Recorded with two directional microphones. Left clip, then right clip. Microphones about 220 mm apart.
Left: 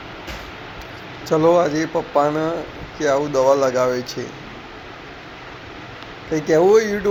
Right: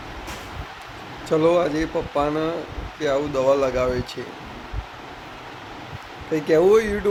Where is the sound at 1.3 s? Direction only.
Centre (ahead or behind).